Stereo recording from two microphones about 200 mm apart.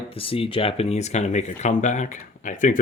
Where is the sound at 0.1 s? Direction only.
25° left (ahead or behind).